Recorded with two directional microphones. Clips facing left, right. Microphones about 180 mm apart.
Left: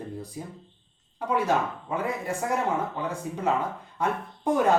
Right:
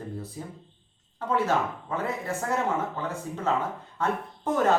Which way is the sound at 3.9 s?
15° left (ahead or behind).